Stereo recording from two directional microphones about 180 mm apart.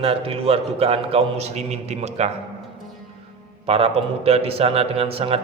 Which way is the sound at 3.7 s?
30° right (ahead or behind).